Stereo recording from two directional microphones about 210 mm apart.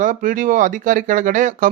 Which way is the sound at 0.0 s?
40° right (ahead or behind).